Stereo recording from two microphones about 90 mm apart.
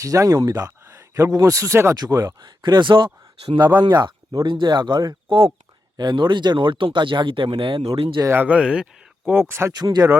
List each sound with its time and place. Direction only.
0.0 s speech: 40° right (ahead or behind)
2.0 s speech: 45° right (ahead or behind); by 3.6 s 70° right (ahead or behind)
3.8 s speech: 55° right (ahead or behind); by 8.2 s 90° right
8.3 s speech: 20° right (ahead or behind)
8.5 s speech: 10° right (ahead or behind)
9.2 s speech: 25° right (ahead or behind)
9.7 s speech: 50° right (ahead or behind)